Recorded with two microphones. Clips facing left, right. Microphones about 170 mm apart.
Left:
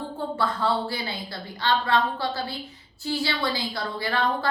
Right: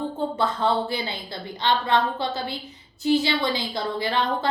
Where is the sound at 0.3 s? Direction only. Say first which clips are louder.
Right 1 dB; 20° right (ahead or behind).